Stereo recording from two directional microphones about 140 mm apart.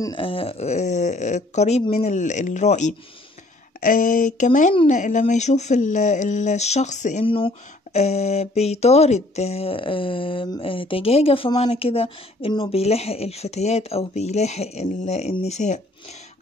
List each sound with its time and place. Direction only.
0.0 s speech: 35° left (ahead or behind); by 2.9 s 60° left (ahead or behind)
3.8 s speech: 75° left (ahead or behind)
7.2 s speech: 40° left (ahead or behind); by 15.8 s 55° left (ahead or behind)